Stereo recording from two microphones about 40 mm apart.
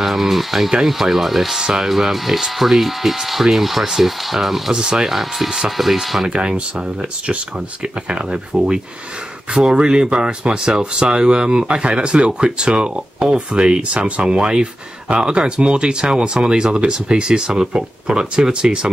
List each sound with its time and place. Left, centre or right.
0.0 s speech: centre
1.6 s speech: centre
5.1 s speech: centre
6.2 s speech: right
9.6 s speech: centre